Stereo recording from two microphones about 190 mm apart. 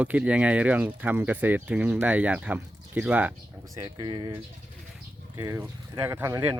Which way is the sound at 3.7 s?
20° right (ahead or behind).